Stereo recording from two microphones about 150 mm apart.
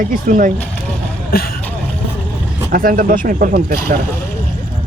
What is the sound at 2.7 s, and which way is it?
Speech, 70° right (ahead or behind).